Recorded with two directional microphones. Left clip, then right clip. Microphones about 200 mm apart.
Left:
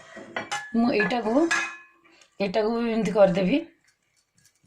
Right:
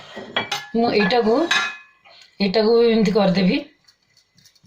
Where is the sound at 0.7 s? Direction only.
40° left (ahead or behind).